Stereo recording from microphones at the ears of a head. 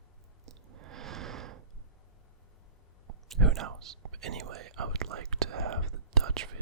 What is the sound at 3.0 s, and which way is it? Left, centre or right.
Whispering, right.